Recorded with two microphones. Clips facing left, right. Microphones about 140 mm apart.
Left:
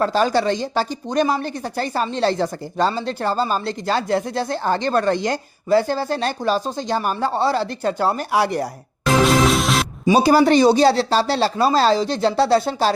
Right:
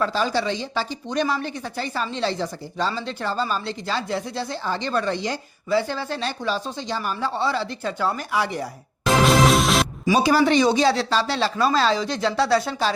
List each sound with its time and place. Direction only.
0.0 s speech: 50° left (ahead or behind)
8.3 s speech: 70° left (ahead or behind)
9.2 s music: centre (ahead or behind)
10.1 s speech: 35° left (ahead or behind)